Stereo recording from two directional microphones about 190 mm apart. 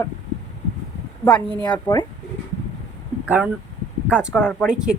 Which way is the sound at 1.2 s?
5° left (ahead or behind).